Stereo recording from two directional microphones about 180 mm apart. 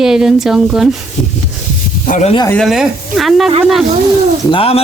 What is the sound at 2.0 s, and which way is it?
Speech, 45° left (ahead or behind).